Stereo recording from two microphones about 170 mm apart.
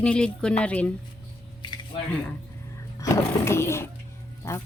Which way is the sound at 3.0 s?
15° left (ahead or behind).